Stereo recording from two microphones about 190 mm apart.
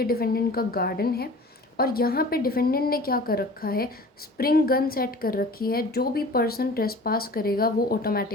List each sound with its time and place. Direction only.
0.0 s a woman's voice: 50° left (ahead or behind)